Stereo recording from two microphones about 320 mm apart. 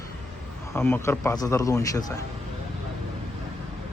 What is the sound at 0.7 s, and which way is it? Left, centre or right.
Speech, centre.